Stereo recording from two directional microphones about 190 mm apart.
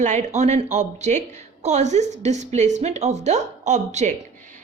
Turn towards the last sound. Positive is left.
turn(degrees=-40)  # may be behind; listen again after turning